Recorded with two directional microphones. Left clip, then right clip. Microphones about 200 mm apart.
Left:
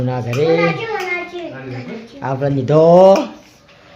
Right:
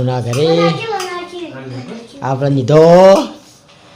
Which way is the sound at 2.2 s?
15° right (ahead or behind).